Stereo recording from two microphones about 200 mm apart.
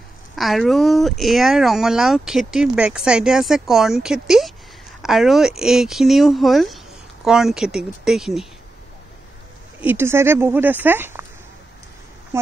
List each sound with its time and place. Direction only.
0.4 s speech: centre (ahead or behind)
9.8 s speech: 10° right (ahead or behind)